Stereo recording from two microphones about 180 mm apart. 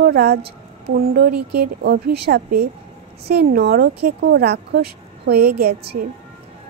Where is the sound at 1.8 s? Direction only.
60° right (ahead or behind).